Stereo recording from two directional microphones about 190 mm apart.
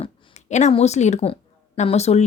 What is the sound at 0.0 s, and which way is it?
A woman's voice, 35° left (ahead or behind).